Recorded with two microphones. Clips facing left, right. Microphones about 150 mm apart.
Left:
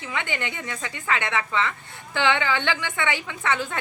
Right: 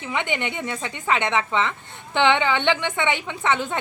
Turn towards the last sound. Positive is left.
turn(degrees=-20)  # may be behind; listen again after turning